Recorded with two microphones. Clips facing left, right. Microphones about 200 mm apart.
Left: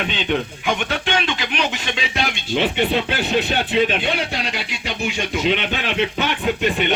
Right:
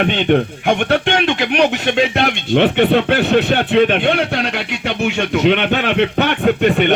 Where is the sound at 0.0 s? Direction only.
60° right (ahead or behind).